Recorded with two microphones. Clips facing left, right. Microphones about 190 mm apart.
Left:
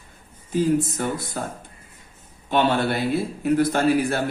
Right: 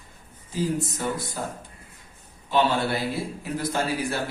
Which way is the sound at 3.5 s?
55° left (ahead or behind).